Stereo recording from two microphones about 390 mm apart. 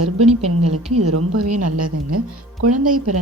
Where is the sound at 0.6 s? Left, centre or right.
Right.